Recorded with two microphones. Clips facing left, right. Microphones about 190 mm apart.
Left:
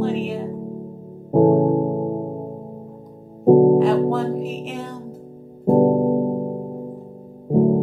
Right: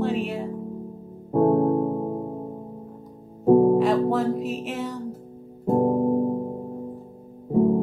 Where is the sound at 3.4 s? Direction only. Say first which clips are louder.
Left 4 dB; 30° left (ahead or behind).